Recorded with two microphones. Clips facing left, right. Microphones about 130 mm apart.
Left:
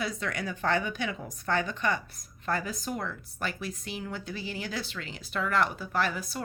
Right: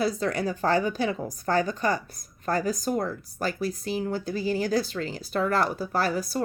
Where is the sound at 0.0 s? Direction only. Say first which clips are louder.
Right 7 dB; 35° right (ahead or behind).